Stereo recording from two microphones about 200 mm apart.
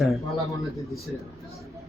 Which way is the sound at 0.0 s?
Centre (ahead or behind).